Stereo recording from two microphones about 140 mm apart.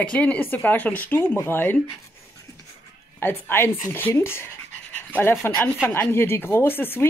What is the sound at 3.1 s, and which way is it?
A woman's voice, 15° left (ahead or behind).